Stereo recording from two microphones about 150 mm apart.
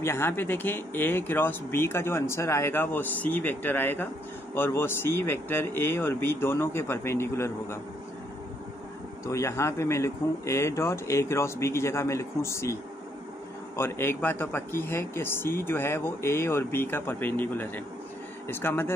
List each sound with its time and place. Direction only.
0.0 s speech: 15° left (ahead or behind)
9.2 s speech: 20° left (ahead or behind)
13.7 s speech: 15° left (ahead or behind)